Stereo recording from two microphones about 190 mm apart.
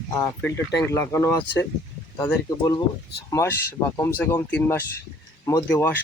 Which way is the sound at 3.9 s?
15° left (ahead or behind).